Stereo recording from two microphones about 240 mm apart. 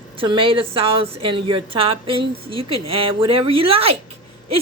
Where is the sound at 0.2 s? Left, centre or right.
Right.